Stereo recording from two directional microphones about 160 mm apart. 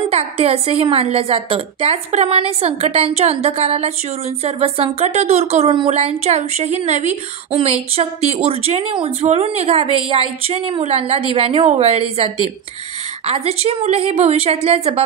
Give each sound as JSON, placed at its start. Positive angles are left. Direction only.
{"t": 0.1, "sound": "a woman's voice", "side_deg": -40}